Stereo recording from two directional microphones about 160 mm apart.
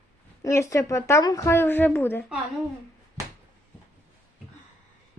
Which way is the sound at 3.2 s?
20° right (ahead or behind).